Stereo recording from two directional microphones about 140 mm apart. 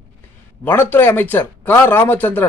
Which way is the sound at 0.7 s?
15° left (ahead or behind).